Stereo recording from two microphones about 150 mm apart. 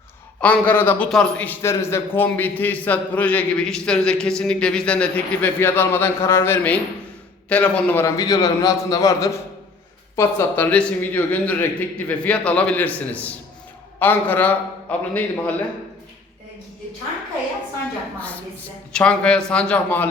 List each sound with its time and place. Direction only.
0.3 s a man's voice: 10° left (ahead or behind)
18.9 s a man's voice: 5° left (ahead or behind)